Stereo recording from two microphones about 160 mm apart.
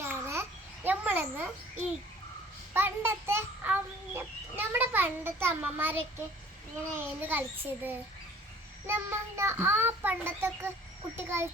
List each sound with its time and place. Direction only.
0.1 s babbling: 15° right (ahead or behind)
0.9 s a sound: 10° right (ahead or behind)
2.7 s fowl: 15° right (ahead or behind)